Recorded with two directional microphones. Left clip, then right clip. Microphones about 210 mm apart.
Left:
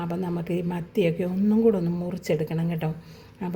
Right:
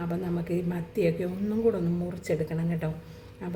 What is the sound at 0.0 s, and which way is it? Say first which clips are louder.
Speech: left 2 dB; 35° left (ahead or behind).